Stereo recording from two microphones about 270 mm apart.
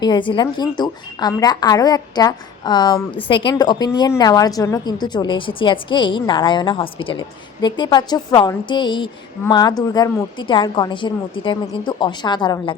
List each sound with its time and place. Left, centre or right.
0.0 s a woman's voice: centre